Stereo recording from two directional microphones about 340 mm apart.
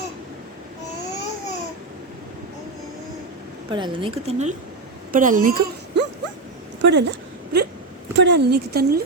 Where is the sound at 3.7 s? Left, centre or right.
Centre; by 7.2 s right.